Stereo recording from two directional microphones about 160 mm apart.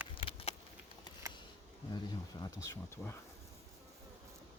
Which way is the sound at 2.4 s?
20° left (ahead or behind).